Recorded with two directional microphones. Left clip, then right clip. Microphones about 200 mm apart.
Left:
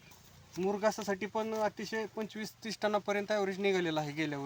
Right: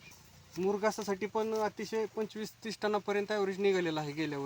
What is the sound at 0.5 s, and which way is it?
Speech, 10° left (ahead or behind).